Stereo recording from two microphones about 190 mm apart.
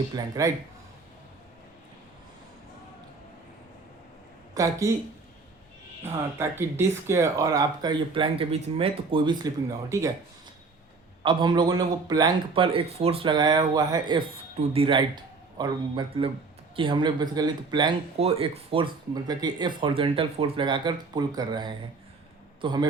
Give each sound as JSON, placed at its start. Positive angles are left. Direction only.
{"t": 0.2, "sound": "speech", "side_deg": -20}
{"t": 4.5, "sound": "speech", "side_deg": -15}
{"t": 6.1, "sound": "speech", "side_deg": -10}
{"t": 11.2, "sound": "speech", "side_deg": -25}